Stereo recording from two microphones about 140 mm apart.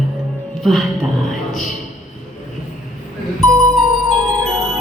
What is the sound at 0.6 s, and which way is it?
Speech, centre (ahead or behind).